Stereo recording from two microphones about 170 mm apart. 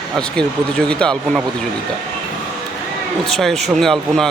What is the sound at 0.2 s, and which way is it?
Speech, 5° left (ahead or behind).